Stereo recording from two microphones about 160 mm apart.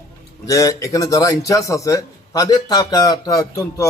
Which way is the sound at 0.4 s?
20° left (ahead or behind).